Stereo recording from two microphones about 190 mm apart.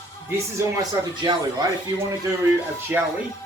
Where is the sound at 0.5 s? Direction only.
20° right (ahead or behind).